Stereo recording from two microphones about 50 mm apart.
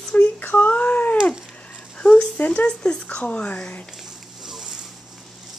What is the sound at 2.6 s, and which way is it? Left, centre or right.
Speech, centre.